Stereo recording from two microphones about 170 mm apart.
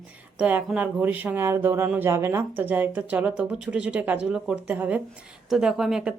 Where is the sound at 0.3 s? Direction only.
5° right (ahead or behind).